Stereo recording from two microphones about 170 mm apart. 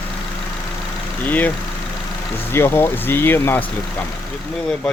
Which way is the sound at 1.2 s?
10° left (ahead or behind).